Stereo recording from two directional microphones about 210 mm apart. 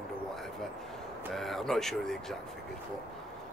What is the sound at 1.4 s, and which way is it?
Speech, centre (ahead or behind).